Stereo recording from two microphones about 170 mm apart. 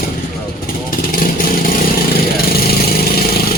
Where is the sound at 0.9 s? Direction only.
55° left (ahead or behind).